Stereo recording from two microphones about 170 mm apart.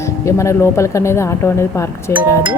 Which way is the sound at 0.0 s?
15° left (ahead or behind).